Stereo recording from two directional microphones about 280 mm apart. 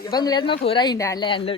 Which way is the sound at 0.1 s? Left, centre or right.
Centre.